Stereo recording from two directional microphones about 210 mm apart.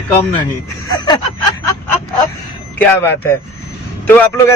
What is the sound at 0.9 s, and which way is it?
Speech, 20° left (ahead or behind).